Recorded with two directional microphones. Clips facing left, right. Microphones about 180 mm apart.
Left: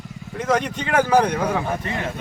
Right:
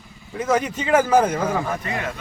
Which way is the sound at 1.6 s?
30° left (ahead or behind).